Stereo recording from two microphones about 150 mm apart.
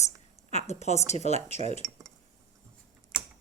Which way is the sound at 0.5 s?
45° left (ahead or behind).